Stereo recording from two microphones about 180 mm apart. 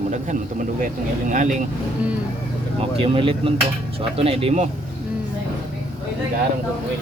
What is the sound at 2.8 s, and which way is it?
A man's voice, 30° right (ahead or behind).